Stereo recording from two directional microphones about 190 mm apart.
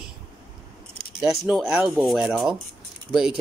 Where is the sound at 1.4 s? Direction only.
Centre (ahead or behind).